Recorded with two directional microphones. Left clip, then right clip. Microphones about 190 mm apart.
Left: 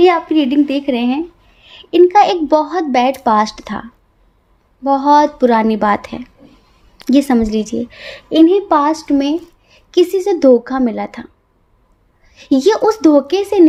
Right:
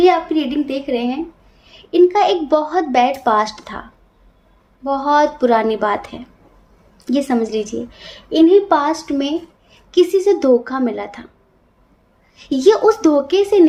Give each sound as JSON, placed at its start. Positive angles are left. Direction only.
{"t": 0.0, "sound": "speech", "side_deg": 45}
{"t": 12.3, "sound": "speech", "side_deg": 45}